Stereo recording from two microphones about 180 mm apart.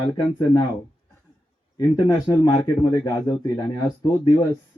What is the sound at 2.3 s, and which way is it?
Speech, 20° left (ahead or behind).